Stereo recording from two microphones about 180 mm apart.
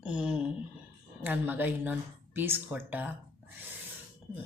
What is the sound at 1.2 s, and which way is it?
A woman's voice, 10° right (ahead or behind).